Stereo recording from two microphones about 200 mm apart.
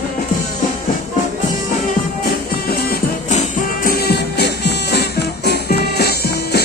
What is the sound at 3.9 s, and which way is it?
Music, 50° left (ahead or behind).